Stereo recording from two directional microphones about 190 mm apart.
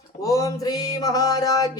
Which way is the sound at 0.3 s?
15° left (ahead or behind).